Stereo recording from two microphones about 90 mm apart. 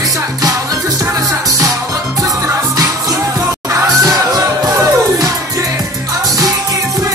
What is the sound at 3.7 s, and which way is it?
Music, 40° right (ahead or behind).